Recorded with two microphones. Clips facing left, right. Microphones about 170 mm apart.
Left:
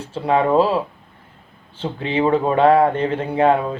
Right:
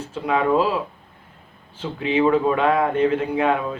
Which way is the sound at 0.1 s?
35° left (ahead or behind).